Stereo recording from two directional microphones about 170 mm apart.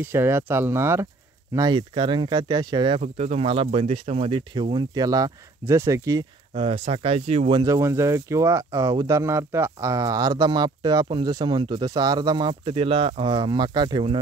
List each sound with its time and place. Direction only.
0.0 s speech: 15° right (ahead or behind)
3.0 s speech: 40° right (ahead or behind); by 6.2 s 20° right (ahead or behind)
6.5 s speech: 35° right (ahead or behind)